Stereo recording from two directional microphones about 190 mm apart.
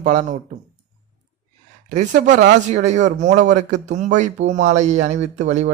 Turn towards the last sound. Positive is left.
turn(degrees=-40)  # may be behind; listen again after turning